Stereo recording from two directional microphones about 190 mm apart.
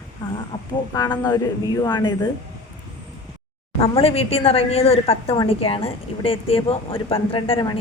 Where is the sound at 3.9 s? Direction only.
30° left (ahead or behind).